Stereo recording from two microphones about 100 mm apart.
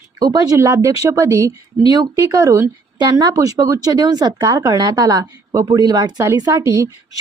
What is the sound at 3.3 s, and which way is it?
A woman's voice, 35° right (ahead or behind).